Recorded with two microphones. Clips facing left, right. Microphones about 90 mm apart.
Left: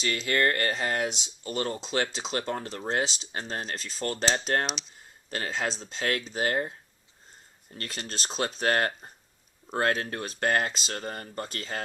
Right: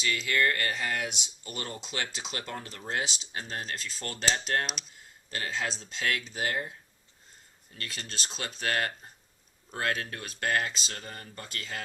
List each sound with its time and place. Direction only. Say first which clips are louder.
0.0 s speech: left 2 dB; 40° left (ahead or behind)
4.6 s speech: left 4 dB; centre (ahead or behind)
5.3 s speech: left 3 dB; 30° left (ahead or behind)